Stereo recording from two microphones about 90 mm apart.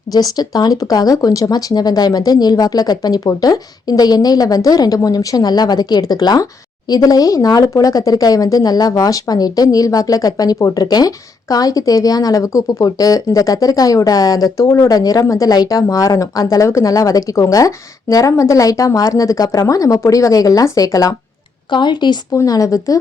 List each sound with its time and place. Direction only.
0.1 s speech: 45° left (ahead or behind)
21.7 s a woman's voice: 60° left (ahead or behind)
22.3 s speech: 40° left (ahead or behind)